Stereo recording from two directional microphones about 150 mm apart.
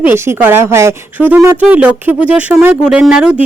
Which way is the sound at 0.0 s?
15° right (ahead or behind).